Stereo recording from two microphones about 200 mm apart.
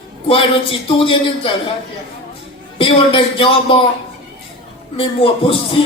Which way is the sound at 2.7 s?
25° left (ahead or behind).